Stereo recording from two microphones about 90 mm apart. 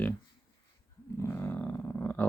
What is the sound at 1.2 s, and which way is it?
Roaring cats, 25° left (ahead or behind).